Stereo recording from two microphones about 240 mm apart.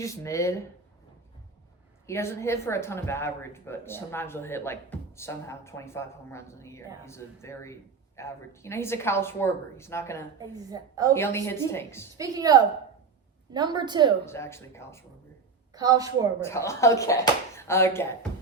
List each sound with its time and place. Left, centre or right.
0.0 s speech: centre
2.0 s speech: centre
10.5 s a woman's voice: centre
11.1 s speech: centre
12.1 s a woman's voice: centre
14.3 s speech: centre
15.7 s a woman's voice: centre
16.4 s speech: centre